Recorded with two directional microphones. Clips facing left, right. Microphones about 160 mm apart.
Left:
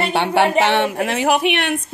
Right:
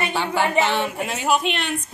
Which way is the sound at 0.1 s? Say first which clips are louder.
Left 7 dB; 65° left (ahead or behind).